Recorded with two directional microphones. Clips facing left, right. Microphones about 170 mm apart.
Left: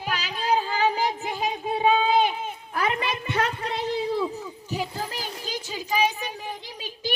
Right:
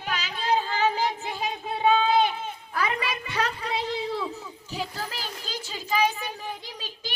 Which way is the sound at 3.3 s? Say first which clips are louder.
Left 1 dB; 50° left (ahead or behind).